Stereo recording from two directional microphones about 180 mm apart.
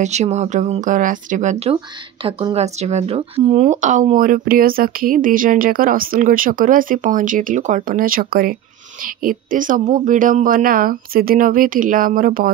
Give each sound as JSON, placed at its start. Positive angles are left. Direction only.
{"t": 0.0, "sound": "speech", "side_deg": -40}